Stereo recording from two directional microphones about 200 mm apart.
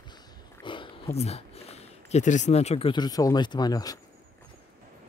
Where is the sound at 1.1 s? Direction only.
30° left (ahead or behind).